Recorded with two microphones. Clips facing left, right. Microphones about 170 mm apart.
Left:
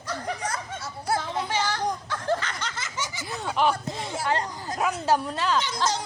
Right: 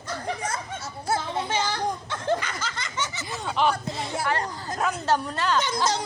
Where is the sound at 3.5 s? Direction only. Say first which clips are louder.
Even; 5° left (ahead or behind).